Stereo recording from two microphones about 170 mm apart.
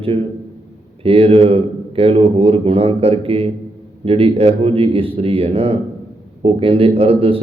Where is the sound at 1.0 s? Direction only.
35° right (ahead or behind).